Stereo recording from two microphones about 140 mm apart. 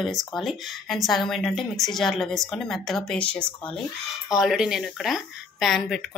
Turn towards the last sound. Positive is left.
turn(degrees=0)  # may be behind; listen again after turning